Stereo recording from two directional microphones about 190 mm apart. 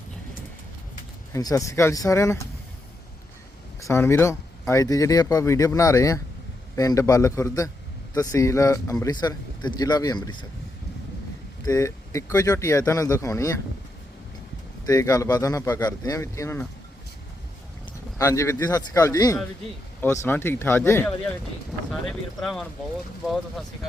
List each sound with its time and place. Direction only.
1.3 s speech: 20° left (ahead or behind)
3.8 s speech: 15° left (ahead or behind)
11.6 s speech: 15° left (ahead or behind)
14.8 s speech: 20° left (ahead or behind)
18.2 s speech: 15° left (ahead or behind)
22.0 s speech: centre (ahead or behind)